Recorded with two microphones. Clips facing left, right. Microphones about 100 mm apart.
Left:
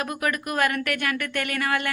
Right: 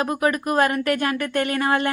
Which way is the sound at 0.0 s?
25° right (ahead or behind).